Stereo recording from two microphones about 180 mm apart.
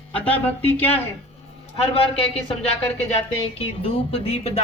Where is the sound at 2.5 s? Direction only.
35° left (ahead or behind).